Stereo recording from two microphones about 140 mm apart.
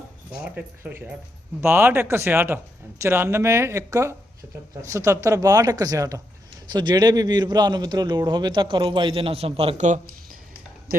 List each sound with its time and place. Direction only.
0.4 s a man's voice: 10° right (ahead or behind); by 9.8 s 45° right (ahead or behind)